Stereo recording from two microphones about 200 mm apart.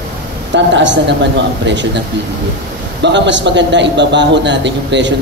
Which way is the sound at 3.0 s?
65° right (ahead or behind).